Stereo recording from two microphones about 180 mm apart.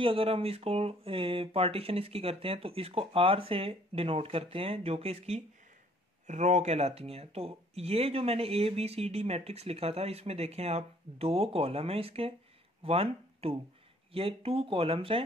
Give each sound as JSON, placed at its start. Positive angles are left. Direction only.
{"t": 0.0, "sound": "speech", "side_deg": -30}